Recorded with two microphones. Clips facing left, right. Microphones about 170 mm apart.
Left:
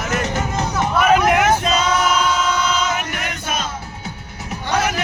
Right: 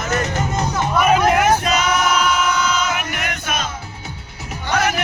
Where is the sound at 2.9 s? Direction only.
30° left (ahead or behind).